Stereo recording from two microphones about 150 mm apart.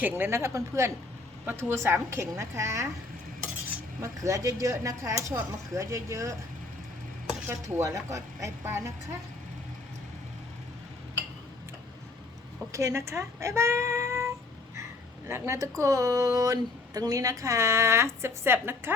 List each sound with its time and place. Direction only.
0.0 s speech: 15° right (ahead or behind)
7.4 s speech: 20° right (ahead or behind)
12.7 s speech: 20° right (ahead or behind)